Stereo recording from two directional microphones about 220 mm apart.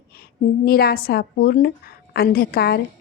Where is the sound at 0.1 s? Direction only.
45° left (ahead or behind).